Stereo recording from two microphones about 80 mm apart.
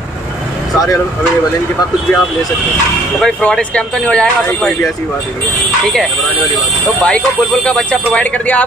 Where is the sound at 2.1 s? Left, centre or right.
Left.